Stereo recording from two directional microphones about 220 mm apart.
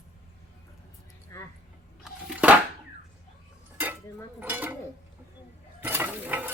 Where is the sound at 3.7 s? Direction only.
10° right (ahead or behind).